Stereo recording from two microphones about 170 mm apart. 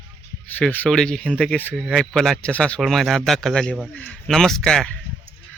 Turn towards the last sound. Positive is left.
turn(degrees=5)  # may be behind; listen again after turning